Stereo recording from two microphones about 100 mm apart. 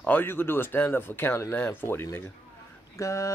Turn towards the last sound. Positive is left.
turn(degrees=30)  # may be behind; listen again after turning